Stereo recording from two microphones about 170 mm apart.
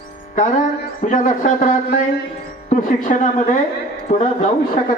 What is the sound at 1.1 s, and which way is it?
Speech, 50° left (ahead or behind).